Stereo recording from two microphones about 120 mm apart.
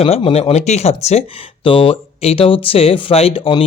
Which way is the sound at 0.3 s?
60° left (ahead or behind).